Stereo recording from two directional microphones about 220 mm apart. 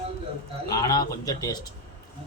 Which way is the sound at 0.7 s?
15° left (ahead or behind).